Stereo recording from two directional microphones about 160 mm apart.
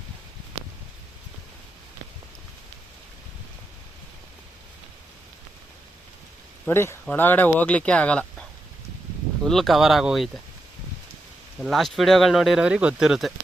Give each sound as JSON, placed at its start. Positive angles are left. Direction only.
{"t": 6.7, "sound": "speech", "side_deg": 15}
{"t": 11.6, "sound": "speech", "side_deg": 0}